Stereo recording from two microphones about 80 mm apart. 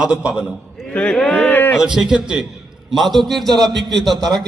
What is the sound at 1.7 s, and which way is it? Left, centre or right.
A man's voice, centre.